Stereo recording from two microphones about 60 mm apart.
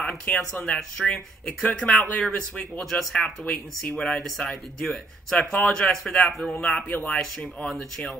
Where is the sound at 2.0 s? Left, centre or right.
Left.